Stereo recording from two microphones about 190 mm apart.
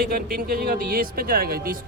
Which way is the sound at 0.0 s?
50° right (ahead or behind).